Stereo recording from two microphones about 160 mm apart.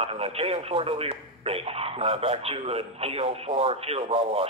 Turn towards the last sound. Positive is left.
turn(degrees=-40)  # may be behind; listen again after turning